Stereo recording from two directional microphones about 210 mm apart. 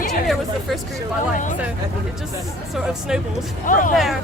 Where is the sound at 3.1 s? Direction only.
5° right (ahead or behind).